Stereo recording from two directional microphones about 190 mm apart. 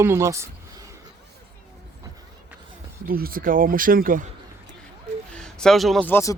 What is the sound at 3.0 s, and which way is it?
Speech, 50° right (ahead or behind).